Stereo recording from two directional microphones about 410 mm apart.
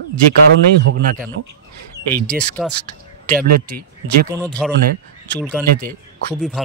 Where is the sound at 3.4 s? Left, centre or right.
Right.